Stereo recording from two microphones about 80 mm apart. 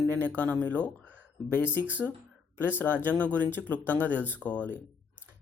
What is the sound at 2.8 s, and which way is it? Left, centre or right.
A man's voice, left.